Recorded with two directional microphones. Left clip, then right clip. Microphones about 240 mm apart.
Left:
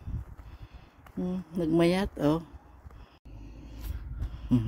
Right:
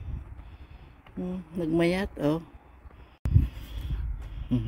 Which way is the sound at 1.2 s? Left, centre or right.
Centre.